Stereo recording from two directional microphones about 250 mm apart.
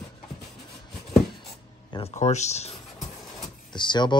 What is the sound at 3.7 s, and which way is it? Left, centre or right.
Power windows, centre.